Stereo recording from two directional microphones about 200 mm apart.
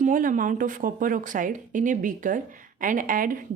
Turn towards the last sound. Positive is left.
turn(degrees=-45)  # may be behind; listen again after turning